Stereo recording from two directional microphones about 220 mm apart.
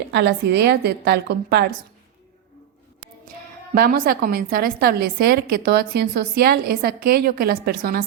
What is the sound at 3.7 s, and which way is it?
A woman's voice, 40° right (ahead or behind).